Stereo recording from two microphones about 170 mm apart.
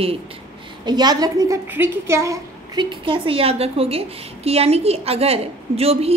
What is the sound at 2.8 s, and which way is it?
A woman's voice, 30° right (ahead or behind).